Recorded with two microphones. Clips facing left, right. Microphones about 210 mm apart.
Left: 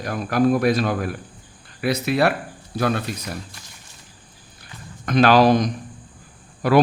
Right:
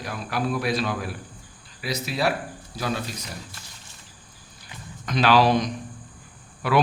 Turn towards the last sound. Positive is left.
turn(degrees=40)  # may be behind; listen again after turning